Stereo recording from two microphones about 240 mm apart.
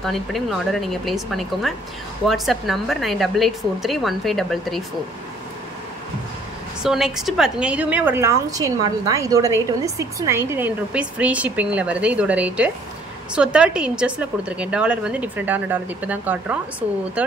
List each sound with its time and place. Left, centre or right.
0.0 s a woman's voice: centre
6.8 s a woman's voice: centre